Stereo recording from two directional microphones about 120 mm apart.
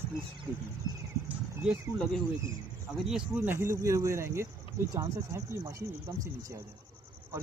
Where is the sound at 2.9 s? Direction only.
5° right (ahead or behind); by 6.6 s 25° right (ahead or behind).